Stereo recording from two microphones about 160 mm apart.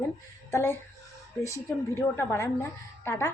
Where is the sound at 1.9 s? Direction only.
15° left (ahead or behind).